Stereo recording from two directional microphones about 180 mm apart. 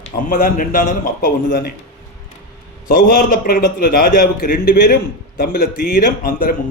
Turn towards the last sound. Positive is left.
turn(degrees=55)  # may be behind; listen again after turning